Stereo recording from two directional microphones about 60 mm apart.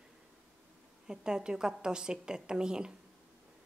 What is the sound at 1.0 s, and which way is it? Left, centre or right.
A woman's voice, centre.